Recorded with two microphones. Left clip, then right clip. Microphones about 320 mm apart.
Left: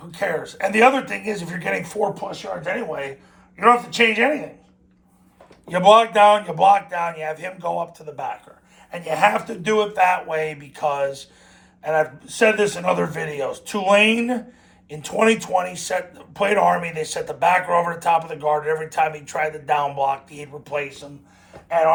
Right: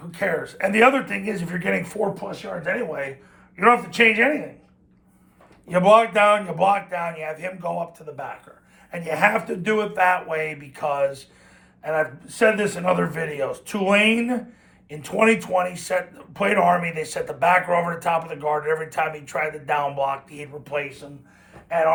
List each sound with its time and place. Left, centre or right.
0.1 s speech: centre
5.6 s speech: centre